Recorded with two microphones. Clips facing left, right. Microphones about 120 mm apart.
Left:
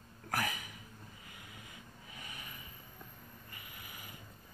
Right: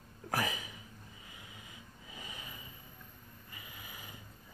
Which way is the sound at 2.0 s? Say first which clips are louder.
Right 2 dB; 25° right (ahead or behind).